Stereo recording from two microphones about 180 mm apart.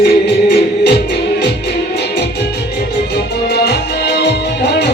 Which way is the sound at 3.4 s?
65° left (ahead or behind).